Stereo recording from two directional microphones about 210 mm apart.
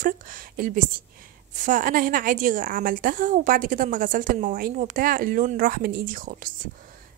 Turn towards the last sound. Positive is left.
turn(degrees=-40)  # may be behind; listen again after turning